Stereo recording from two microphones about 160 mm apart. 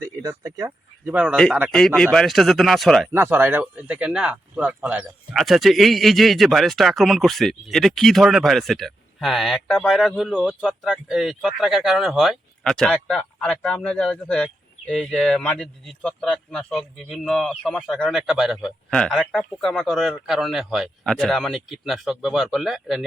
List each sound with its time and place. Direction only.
0.0 s speech: 20° right (ahead or behind)
1.0 s speech: 10° right (ahead or behind)
1.7 s speech: 5° left (ahead or behind)
3.1 s speech: 15° right (ahead or behind)